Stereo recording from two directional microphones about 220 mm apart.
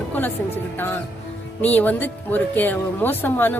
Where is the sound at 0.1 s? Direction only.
10° left (ahead or behind).